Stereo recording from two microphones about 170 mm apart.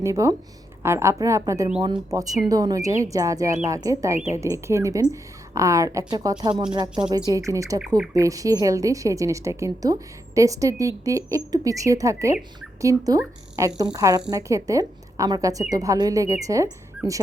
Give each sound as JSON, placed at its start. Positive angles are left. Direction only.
{"t": 0.0, "sound": "a woman's voice", "side_deg": -20}
{"t": 7.8, "sound": "speech", "side_deg": -5}
{"t": 8.1, "sound": "a woman's voice", "side_deg": -20}